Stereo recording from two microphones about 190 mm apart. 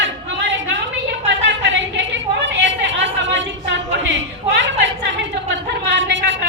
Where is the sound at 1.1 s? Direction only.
70° right (ahead or behind).